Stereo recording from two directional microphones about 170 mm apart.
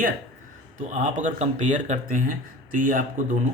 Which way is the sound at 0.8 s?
45° right (ahead or behind).